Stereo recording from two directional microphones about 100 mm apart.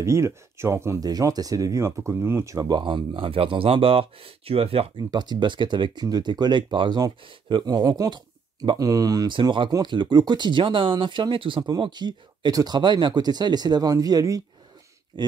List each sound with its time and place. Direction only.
0.0 s speech: 30° right (ahead or behind)
1.0 s speech: 40° right (ahead or behind)
2.8 s speech: 55° right (ahead or behind); by 4.8 s 75° right (ahead or behind)
4.9 s speech: 45° right (ahead or behind)
7.6 s speech: 40° right (ahead or behind)
9.3 s speech: 55° right (ahead or behind); by 14.4 s 35° right (ahead or behind)
15.2 s speech: 50° right (ahead or behind)